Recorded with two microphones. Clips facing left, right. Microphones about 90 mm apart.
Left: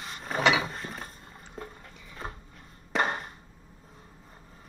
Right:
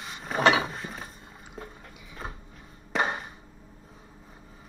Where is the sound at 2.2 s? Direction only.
Centre (ahead or behind).